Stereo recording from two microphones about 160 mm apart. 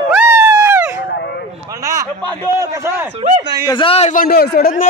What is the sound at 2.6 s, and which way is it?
Speech, 20° right (ahead or behind).